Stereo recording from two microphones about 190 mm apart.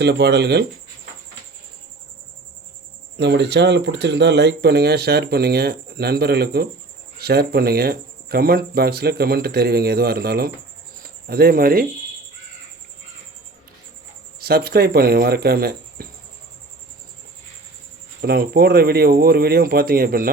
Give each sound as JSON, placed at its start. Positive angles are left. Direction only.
{"t": 0.0, "sound": "speech", "side_deg": -60}
{"t": 3.2, "sound": "speech", "side_deg": -65}
{"t": 14.4, "sound": "speech", "side_deg": -55}
{"t": 18.2, "sound": "speech", "side_deg": -55}